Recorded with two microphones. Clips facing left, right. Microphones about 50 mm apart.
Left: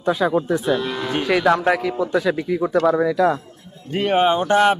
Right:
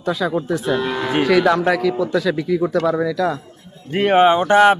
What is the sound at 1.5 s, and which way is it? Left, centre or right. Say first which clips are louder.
Speech: right 1 dB; centre.